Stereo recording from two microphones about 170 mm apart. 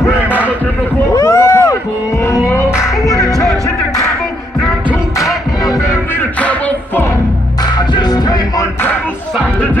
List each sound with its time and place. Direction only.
1.1 s rowboat: 15° left (ahead or behind)
2.3 s music: 20° left (ahead or behind)
7.9 s music: 20° left (ahead or behind)